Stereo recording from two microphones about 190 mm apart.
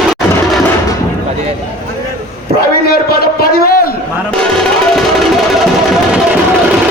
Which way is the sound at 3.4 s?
50° left (ahead or behind).